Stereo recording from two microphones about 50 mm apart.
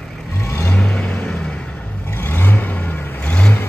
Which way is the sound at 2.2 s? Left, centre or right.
Left.